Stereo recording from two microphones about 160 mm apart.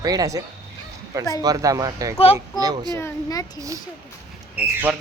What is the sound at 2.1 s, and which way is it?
Speech, 40° left (ahead or behind).